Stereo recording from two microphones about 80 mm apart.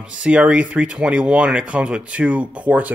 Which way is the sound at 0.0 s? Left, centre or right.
Centre.